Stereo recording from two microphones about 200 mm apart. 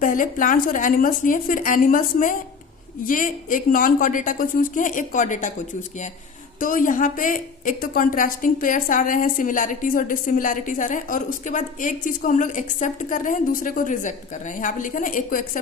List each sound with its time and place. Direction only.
0.0 s a woman's voice: 40° left (ahead or behind)
6.6 s a woman's voice: 40° left (ahead or behind)